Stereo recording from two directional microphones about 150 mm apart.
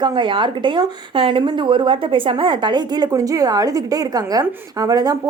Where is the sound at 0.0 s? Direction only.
30° right (ahead or behind).